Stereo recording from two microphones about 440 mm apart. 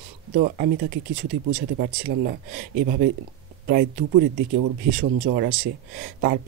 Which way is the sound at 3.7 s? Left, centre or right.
Right.